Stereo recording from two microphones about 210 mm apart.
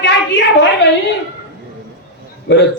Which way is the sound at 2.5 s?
60° left (ahead or behind).